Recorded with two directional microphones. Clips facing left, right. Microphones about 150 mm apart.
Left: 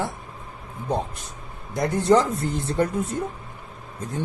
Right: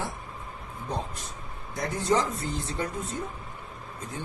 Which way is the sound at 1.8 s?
60° left (ahead or behind).